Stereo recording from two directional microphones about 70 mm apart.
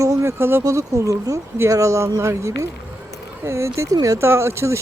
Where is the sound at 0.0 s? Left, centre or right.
Right.